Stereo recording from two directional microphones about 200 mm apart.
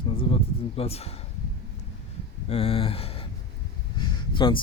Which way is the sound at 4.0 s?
25° left (ahead or behind).